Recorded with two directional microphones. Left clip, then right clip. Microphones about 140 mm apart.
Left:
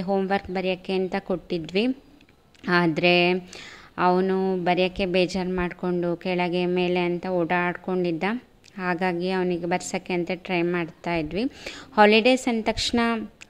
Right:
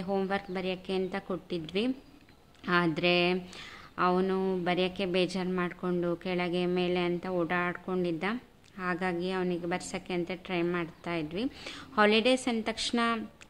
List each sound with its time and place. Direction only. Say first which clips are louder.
0.3 s a woman's voice: left 8 dB; 30° left (ahead or behind)